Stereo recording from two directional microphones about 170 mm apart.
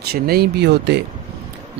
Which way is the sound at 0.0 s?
65° right (ahead or behind).